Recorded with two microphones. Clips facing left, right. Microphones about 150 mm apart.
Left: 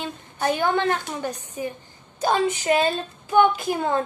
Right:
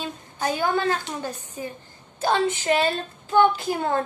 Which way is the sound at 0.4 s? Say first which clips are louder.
Left 2 dB; 20° left (ahead or behind).